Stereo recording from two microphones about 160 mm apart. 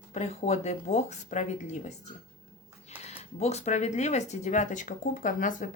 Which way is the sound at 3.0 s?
40° left (ahead or behind).